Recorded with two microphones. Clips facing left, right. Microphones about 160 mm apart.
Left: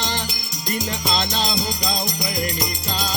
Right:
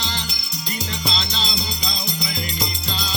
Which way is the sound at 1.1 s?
50° left (ahead or behind).